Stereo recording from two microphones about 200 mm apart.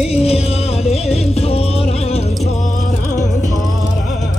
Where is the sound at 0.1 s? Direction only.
30° left (ahead or behind).